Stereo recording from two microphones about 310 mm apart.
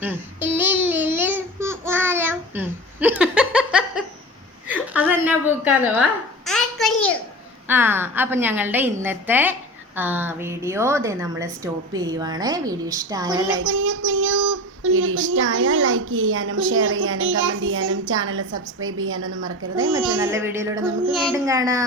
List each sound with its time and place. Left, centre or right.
0.0 s babbling: centre
4.7 s a sound: centre
7.7 s a woman's voice: centre
13.6 s speech: right
20.2 s a woman's voice: centre